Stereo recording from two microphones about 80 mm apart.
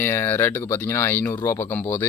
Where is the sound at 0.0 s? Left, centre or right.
Left.